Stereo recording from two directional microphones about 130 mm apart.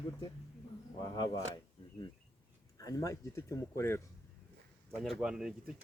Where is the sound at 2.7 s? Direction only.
25° left (ahead or behind).